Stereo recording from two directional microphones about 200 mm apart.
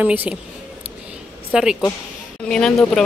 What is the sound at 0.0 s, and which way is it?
Speech, 10° right (ahead or behind).